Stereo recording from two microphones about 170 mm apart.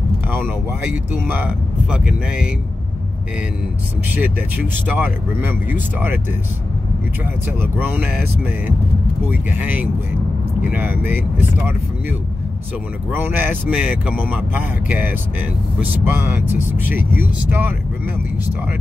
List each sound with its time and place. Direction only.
1.2 s speech: 10° right (ahead or behind)
4.1 s speech: 10° right (ahead or behind)
7.6 s speech: 10° right (ahead or behind)